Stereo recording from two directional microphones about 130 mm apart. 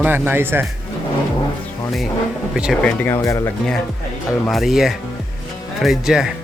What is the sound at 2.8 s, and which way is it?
Speech, 15° left (ahead or behind).